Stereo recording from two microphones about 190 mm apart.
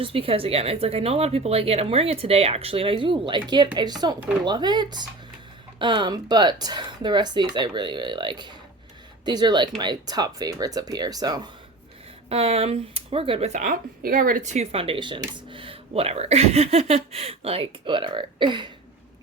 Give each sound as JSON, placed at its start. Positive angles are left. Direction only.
{"t": 0.0, "sound": "speech", "side_deg": -30}
{"t": 12.3, "sound": "speech", "side_deg": -30}